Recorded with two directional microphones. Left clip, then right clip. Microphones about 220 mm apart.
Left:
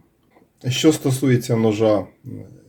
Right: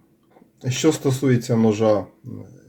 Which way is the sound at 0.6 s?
5° left (ahead or behind).